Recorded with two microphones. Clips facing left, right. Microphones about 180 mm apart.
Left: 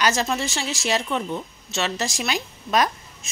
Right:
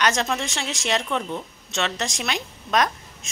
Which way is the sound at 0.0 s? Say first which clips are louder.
Left 1 dB; 5° left (ahead or behind).